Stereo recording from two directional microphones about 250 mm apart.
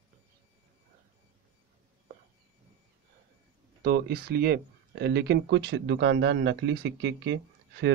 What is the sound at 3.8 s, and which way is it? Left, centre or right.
Speech, right.